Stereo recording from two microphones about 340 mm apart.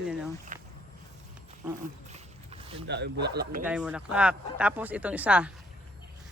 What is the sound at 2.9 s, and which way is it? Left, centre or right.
Speech, right.